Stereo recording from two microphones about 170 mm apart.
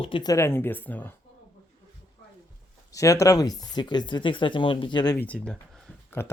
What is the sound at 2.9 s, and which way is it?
Speech, 20° left (ahead or behind).